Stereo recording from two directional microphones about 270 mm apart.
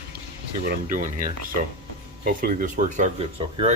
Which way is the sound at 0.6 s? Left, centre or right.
Right.